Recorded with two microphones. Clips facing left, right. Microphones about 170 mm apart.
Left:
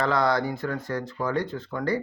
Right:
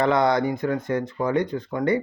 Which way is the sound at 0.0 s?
20° right (ahead or behind).